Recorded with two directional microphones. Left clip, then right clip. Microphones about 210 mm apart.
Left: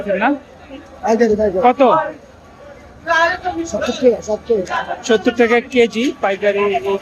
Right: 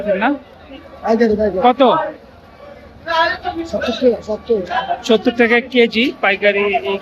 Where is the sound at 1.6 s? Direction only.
5° right (ahead or behind).